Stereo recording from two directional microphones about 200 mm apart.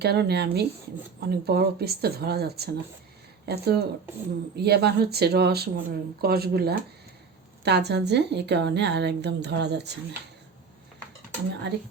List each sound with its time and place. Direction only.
0.0 s a woman's voice: 55° right (ahead or behind)
11.7 s a woman's voice: 60° right (ahead or behind)